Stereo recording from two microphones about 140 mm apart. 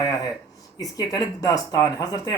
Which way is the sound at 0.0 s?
25° left (ahead or behind).